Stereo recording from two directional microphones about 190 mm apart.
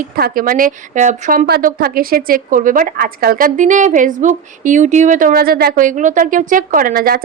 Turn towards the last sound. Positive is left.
turn(degrees=-50)  # may be behind; listen again after turning